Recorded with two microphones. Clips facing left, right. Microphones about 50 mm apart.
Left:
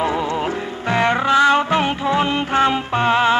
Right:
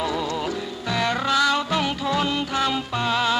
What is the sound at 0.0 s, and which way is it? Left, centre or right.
Music, left.